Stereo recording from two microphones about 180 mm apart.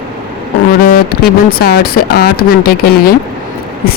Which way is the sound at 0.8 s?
55° left (ahead or behind).